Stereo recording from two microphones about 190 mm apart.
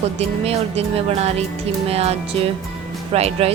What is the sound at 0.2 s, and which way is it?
A woman's voice, 35° right (ahead or behind).